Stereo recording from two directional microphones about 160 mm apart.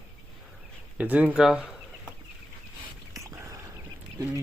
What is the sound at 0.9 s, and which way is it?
Speech, 10° right (ahead or behind).